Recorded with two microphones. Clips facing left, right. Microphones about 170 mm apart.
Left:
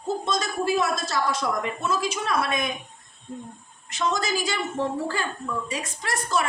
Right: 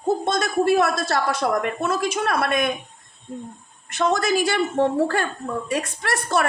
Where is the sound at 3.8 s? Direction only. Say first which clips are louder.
Right 5 dB; 60° right (ahead or behind).